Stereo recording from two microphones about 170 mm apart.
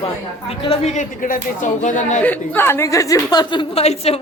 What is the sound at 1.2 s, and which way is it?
A woman's voice, 50° left (ahead or behind).